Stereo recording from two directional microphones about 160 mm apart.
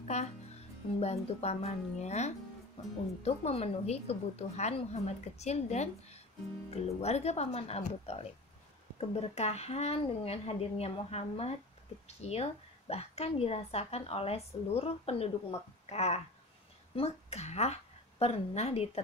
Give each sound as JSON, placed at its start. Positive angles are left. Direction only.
{"t": 0.1, "sound": "a woman's voice", "side_deg": 45}